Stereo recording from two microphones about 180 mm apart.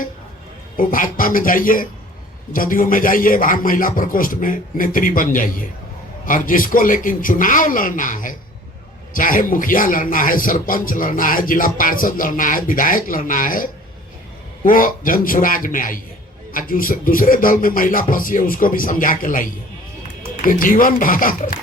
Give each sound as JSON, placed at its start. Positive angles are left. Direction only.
{"t": 0.8, "sound": "speech", "side_deg": 50}